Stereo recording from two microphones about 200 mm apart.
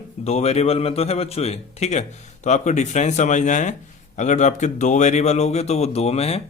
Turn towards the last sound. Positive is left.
turn(degrees=30)  # may be behind; listen again after turning